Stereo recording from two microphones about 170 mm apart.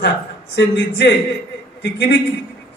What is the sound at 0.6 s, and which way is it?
A man's voice, 90° left.